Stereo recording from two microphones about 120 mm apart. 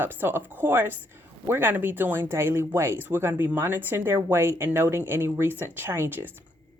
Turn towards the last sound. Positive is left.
turn(degrees=-20)  # may be behind; listen again after turning